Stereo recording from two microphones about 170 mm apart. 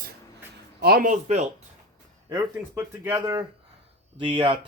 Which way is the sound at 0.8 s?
60° right (ahead or behind).